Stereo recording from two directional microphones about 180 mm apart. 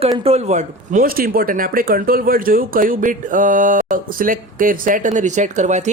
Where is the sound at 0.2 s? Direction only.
35° right (ahead or behind).